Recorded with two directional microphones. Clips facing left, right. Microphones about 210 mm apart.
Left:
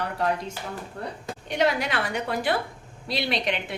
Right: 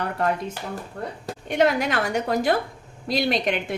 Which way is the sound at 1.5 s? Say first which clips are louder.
Right 4 dB; 50° right (ahead or behind).